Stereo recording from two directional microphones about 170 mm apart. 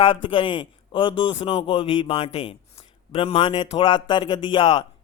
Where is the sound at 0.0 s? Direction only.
30° left (ahead or behind).